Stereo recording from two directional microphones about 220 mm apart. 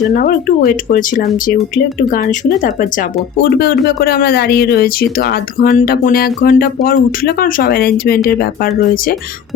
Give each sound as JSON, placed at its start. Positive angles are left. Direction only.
{"t": 0.1, "sound": "speech", "side_deg": 40}